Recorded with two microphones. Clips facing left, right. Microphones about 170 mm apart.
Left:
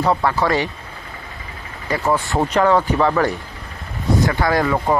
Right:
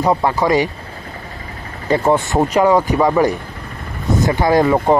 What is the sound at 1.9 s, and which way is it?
Speech, 25° right (ahead or behind).